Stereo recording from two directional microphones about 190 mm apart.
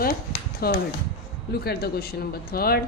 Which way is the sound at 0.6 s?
55° left (ahead or behind).